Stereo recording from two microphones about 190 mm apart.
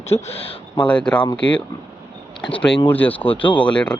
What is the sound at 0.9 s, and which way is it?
Speech, 5° left (ahead or behind).